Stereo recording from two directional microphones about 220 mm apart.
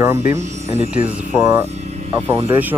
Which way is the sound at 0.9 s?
5° right (ahead or behind).